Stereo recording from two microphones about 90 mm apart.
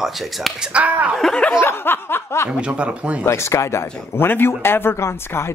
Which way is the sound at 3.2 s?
30° left (ahead or behind).